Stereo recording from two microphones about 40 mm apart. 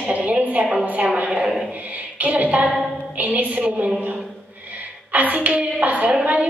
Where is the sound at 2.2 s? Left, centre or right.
Right.